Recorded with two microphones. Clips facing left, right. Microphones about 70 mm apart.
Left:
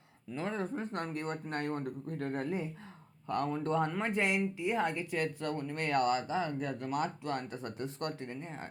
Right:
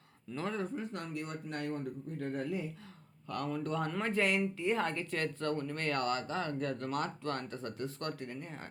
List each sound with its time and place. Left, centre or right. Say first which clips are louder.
0.3 s speech: left 1 dB; left
0.6 s speech: left 2 dB; left
3.2 s speech: left 3 dB; left